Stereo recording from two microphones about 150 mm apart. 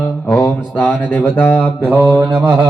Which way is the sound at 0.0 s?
5° left (ahead or behind).